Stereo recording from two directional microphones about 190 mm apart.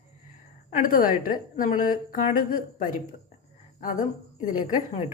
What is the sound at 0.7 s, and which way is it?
A woman's voice, 45° left (ahead or behind).